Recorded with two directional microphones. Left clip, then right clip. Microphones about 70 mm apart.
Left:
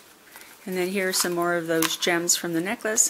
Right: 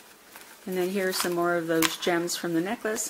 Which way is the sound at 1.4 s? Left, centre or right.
Left.